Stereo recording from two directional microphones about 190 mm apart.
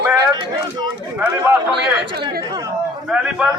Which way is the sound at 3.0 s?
5° right (ahead or behind).